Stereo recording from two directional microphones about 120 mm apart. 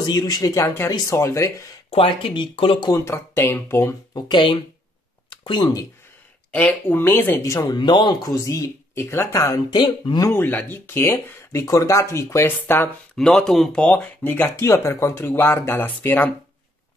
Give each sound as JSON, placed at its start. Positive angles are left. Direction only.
{"t": 0.0, "sound": "speech", "side_deg": 35}
{"t": 1.9, "sound": "speech", "side_deg": 50}
{"t": 2.9, "sound": "speech", "side_deg": 20}
{"t": 4.1, "sound": "speech", "side_deg": 40}
{"t": 5.3, "sound": "a sound", "side_deg": 40}
{"t": 6.5, "sound": "speech", "side_deg": 15}
{"t": 10.2, "sound": "speech", "side_deg": 20}
{"t": 13.1, "sound": "speech", "side_deg": 5}